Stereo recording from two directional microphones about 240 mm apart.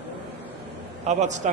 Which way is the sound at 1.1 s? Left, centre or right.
Right.